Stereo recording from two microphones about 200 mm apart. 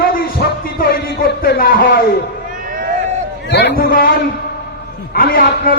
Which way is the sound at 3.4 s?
55° left (ahead or behind).